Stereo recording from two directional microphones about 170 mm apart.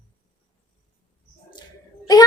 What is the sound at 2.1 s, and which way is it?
Speech, 20° left (ahead or behind).